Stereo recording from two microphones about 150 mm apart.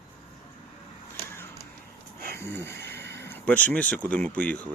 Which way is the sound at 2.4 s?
15° left (ahead or behind).